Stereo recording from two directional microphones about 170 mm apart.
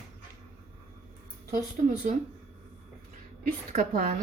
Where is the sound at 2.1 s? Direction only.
50° right (ahead or behind).